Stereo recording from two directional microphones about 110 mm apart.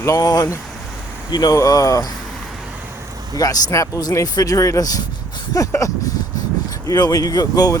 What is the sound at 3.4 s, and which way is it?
Speech, 30° left (ahead or behind).